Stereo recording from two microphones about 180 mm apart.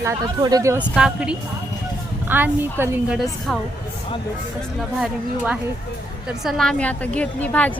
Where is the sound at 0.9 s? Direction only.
5° right (ahead or behind).